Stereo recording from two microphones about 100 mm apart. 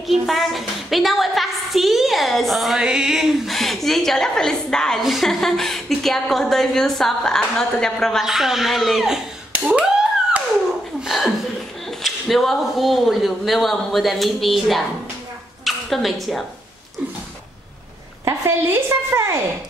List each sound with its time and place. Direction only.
0.1 s a woman's voice: centre (ahead or behind)
11.1 s chuckle: centre (ahead or behind)
12.0 s a woman's voice: centre (ahead or behind)
18.2 s a woman's voice: 25° right (ahead or behind)